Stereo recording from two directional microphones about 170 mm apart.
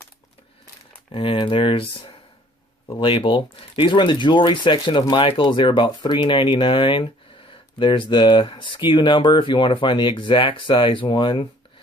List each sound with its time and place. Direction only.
1.1 s speech: 30° left (ahead or behind)